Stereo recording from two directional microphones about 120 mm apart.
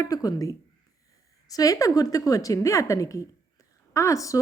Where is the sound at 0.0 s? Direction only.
30° left (ahead or behind).